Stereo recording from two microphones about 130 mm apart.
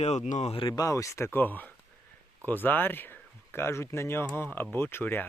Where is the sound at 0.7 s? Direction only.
25° left (ahead or behind).